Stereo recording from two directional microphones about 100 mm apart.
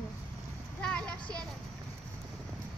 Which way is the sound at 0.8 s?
10° left (ahead or behind).